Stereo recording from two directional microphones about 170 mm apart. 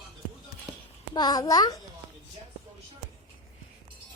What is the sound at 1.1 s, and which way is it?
Speech, 25° left (ahead or behind).